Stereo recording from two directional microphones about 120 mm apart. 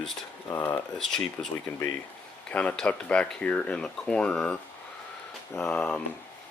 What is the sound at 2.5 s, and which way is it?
Speech, 10° left (ahead or behind).